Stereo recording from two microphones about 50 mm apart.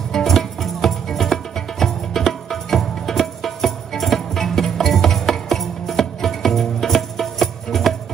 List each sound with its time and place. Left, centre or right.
0.1 s music: centre